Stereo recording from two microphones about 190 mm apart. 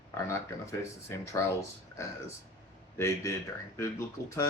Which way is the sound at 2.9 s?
15° left (ahead or behind).